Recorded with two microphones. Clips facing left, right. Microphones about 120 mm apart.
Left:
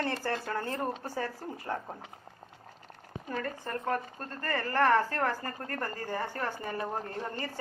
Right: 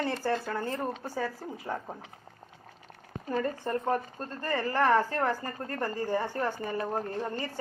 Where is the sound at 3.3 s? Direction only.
20° right (ahead or behind).